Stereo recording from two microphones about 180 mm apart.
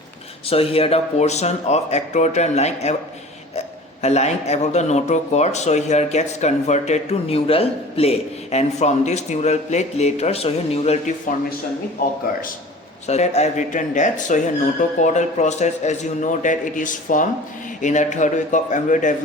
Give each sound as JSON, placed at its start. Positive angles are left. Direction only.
{"t": 0.4, "sound": "speech", "side_deg": 30}
{"t": 4.0, "sound": "speech", "side_deg": 35}
{"t": 13.1, "sound": "speech", "side_deg": 40}